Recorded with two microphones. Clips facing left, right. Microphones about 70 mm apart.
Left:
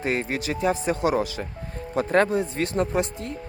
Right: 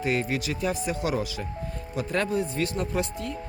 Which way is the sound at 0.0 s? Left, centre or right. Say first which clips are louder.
Left 1 dB; left.